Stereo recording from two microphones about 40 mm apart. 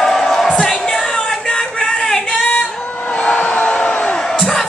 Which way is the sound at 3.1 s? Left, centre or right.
Left.